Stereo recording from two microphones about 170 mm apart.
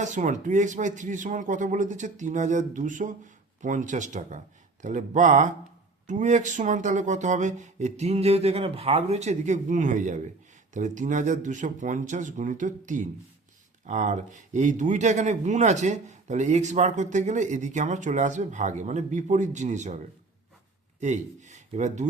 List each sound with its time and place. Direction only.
0.0 s speech: 45° right (ahead or behind)
21.0 s speech: 45° right (ahead or behind)